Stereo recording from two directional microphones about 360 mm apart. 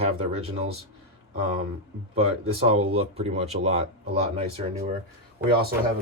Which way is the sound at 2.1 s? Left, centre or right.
Centre.